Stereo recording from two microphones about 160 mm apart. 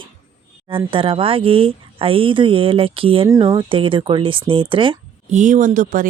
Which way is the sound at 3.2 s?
25° right (ahead or behind).